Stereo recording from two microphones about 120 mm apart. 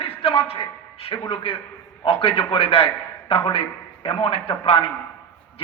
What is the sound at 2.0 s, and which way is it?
A man's voice, 50° left (ahead or behind).